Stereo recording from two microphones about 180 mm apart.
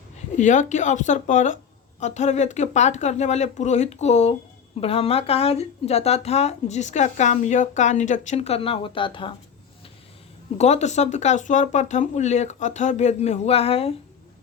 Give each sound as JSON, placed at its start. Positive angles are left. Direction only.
{"t": 0.3, "sound": "speech", "side_deg": 45}
{"t": 10.6, "sound": "speech", "side_deg": 40}